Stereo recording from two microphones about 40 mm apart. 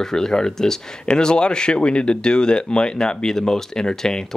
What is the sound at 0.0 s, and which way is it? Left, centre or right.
Speech, centre.